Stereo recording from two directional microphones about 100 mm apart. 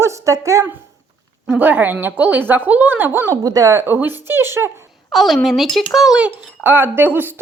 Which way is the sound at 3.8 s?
20° right (ahead or behind).